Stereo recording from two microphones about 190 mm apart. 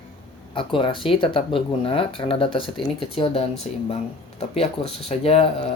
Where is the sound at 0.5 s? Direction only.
25° left (ahead or behind).